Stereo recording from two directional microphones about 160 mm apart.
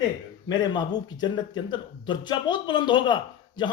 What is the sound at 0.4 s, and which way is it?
Speech, 25° left (ahead or behind).